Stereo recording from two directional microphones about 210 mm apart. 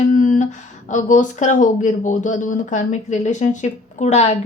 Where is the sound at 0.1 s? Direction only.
40° left (ahead or behind).